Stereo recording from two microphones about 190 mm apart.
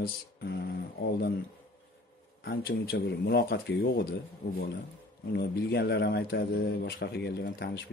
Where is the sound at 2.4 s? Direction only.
55° left (ahead or behind).